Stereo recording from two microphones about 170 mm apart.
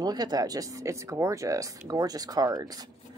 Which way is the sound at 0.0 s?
25° right (ahead or behind).